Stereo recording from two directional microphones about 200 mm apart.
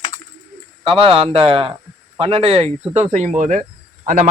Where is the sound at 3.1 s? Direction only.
35° right (ahead or behind).